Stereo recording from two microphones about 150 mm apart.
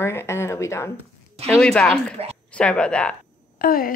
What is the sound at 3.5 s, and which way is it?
Speech, 75° left (ahead or behind).